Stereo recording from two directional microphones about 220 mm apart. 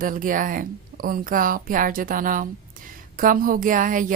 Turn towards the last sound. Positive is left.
turn(degrees=-35)  # may be behind; listen again after turning